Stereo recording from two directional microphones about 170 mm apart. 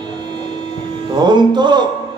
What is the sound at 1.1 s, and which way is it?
Speech, 25° right (ahead or behind).